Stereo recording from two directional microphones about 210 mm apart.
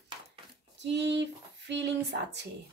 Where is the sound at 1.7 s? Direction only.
55° right (ahead or behind).